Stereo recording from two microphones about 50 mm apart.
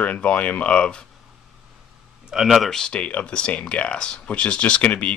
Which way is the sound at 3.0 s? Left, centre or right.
Left.